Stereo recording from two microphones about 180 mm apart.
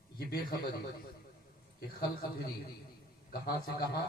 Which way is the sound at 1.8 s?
60° left (ahead or behind).